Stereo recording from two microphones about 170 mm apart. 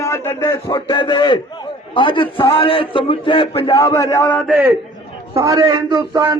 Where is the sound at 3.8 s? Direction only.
20° left (ahead or behind).